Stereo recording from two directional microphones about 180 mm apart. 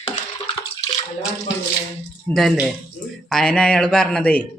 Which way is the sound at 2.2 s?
Centre (ahead or behind).